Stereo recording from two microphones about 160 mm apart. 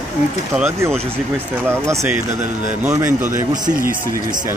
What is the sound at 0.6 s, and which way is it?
Speech, 15° right (ahead or behind).